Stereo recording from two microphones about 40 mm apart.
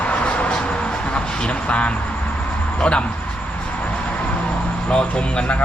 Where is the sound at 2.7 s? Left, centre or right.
Left.